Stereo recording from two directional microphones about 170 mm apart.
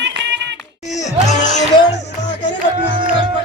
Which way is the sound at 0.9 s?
45° left (ahead or behind).